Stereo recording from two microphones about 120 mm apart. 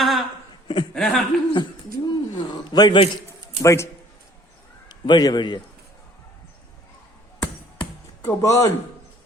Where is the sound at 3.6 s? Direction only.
25° left (ahead or behind).